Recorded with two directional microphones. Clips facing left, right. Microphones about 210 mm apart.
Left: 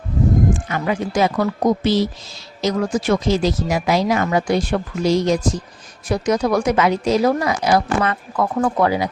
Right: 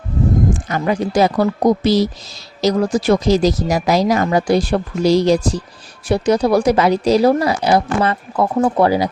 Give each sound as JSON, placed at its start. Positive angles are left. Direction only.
{"t": 0.7, "sound": "speech", "side_deg": -35}